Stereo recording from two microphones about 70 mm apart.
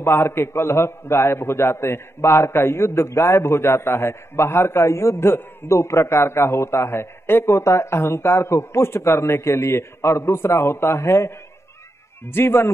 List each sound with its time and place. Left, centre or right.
0.0 s a man's voice: left